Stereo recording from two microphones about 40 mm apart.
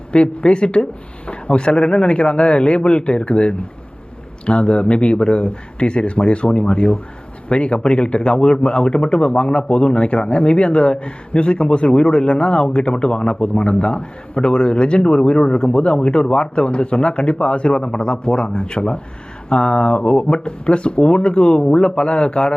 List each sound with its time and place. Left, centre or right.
0.1 s a man's voice: left